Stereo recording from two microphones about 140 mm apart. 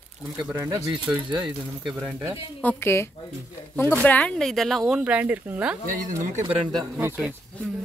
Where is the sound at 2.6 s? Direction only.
15° left (ahead or behind); by 5.8 s 10° right (ahead or behind).